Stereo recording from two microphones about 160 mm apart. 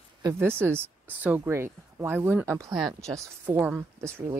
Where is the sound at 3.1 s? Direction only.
10° right (ahead or behind).